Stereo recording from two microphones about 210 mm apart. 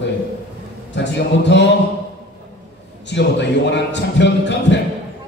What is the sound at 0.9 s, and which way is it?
Speech, 55° left (ahead or behind).